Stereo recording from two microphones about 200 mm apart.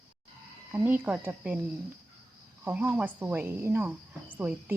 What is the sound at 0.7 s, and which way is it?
Speech, 10° right (ahead or behind).